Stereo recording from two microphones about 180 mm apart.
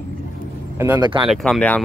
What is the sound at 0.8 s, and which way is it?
Speech, 20° right (ahead or behind).